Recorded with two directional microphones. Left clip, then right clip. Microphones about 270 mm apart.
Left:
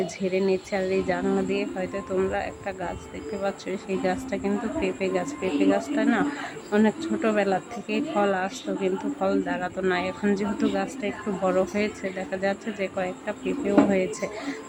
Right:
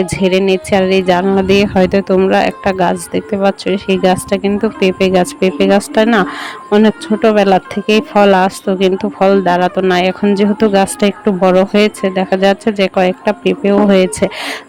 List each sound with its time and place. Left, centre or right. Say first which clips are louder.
0.0 s speech: right 13 dB; right